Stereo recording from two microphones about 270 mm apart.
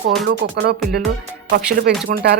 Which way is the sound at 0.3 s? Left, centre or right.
Right.